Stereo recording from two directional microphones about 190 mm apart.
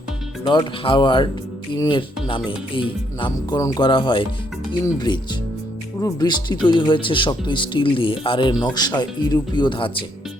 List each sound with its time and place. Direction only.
0.4 s speech: 25° left (ahead or behind)